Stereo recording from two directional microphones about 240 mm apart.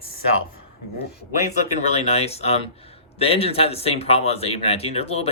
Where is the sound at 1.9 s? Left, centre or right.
Left.